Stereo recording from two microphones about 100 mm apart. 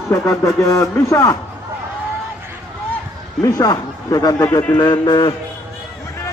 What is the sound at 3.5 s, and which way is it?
Speech, 40° left (ahead or behind).